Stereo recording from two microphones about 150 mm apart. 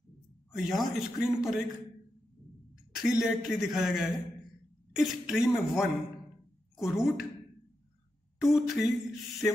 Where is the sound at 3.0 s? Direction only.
5° right (ahead or behind).